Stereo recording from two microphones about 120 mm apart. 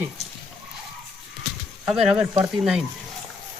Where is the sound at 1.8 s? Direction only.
5° right (ahead or behind).